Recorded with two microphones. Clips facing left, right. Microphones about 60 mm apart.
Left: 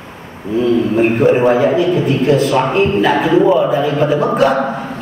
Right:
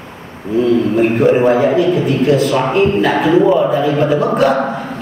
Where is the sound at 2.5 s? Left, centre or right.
Left.